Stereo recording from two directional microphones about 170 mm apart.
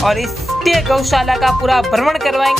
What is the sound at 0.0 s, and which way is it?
Speech, centre (ahead or behind).